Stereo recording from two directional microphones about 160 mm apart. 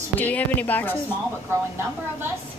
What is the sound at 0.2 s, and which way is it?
Speech, 10° left (ahead or behind).